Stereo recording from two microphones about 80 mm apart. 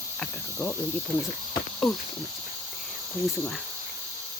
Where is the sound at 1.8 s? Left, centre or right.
Centre.